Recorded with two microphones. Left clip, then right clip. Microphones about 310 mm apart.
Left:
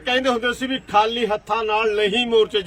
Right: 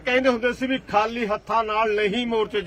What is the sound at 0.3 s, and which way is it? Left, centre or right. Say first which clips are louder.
Speech: left 1 dB; centre.